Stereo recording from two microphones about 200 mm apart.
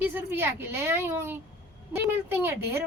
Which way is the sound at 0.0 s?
10° right (ahead or behind).